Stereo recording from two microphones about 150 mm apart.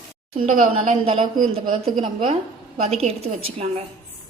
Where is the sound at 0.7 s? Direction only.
40° right (ahead or behind).